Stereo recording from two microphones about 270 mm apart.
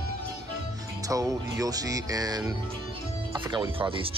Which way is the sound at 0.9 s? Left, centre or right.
Centre.